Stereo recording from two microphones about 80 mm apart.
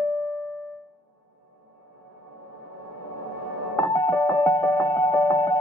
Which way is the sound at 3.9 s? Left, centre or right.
Left.